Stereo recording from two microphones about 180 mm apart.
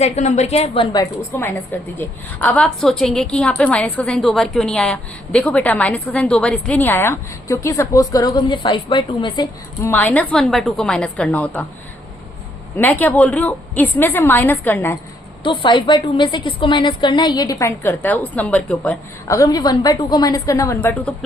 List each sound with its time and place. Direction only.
0.0 s a woman's voice: 40° left (ahead or behind)
0.9 s a woman's voice: 15° left (ahead or behind)
9.9 s a woman's voice: 10° left (ahead or behind)
12.7 s a woman's voice: 10° left (ahead or behind)
15.4 s a woman's voice: 25° left (ahead or behind); by 18.9 s 5° left (ahead or behind)
19.3 s a woman's voice: 20° left (ahead or behind)